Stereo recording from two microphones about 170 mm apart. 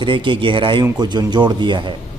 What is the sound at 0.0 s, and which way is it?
A man's voice, 30° right (ahead or behind).